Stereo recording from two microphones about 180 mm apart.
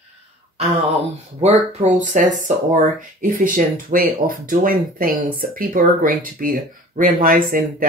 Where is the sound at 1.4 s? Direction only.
40° right (ahead or behind).